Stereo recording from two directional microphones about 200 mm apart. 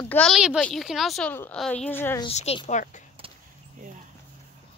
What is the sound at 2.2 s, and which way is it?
Speech, 30° left (ahead or behind).